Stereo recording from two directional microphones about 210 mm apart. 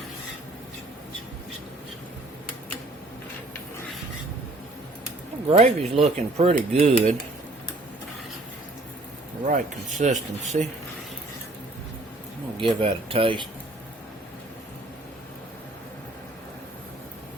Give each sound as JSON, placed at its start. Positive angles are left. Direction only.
{"t": 5.5, "sound": "speech", "side_deg": -30}
{"t": 9.5, "sound": "speech", "side_deg": -40}
{"t": 12.5, "sound": "speech", "side_deg": -25}